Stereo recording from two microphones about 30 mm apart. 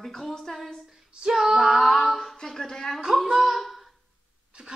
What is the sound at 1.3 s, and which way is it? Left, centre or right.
Speech, centre.